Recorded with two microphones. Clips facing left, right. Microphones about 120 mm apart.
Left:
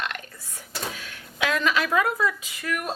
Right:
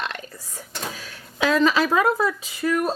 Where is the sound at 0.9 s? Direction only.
35° right (ahead or behind).